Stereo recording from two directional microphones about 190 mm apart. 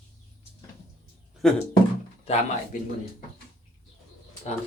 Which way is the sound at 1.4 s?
5° left (ahead or behind).